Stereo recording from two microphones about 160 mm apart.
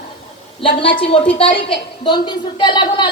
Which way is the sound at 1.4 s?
30° left (ahead or behind).